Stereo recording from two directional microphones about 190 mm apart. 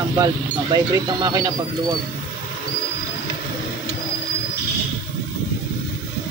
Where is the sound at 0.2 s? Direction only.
20° right (ahead or behind).